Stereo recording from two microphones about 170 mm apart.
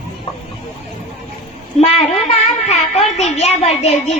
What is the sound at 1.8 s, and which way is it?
A child's voice, 40° left (ahead or behind).